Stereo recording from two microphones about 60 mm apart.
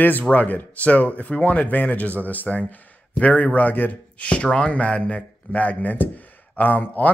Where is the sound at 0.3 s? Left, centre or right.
Left.